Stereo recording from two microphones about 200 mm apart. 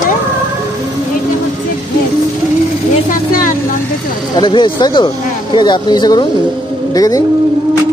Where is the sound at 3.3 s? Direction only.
40° left (ahead or behind).